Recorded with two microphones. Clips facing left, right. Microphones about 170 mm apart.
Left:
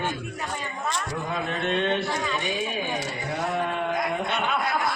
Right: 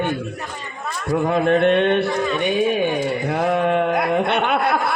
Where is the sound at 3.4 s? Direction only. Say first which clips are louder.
Right 9 dB; 65° right (ahead or behind).